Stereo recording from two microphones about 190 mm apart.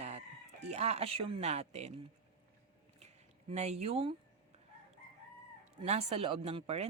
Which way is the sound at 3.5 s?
35° right (ahead or behind).